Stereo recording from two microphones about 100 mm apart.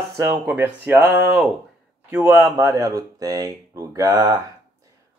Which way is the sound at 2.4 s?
35° right (ahead or behind).